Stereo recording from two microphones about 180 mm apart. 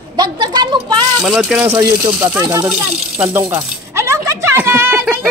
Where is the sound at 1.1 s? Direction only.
Centre (ahead or behind).